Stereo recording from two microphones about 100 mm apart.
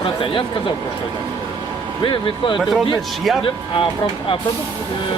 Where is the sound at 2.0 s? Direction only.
55° left (ahead or behind).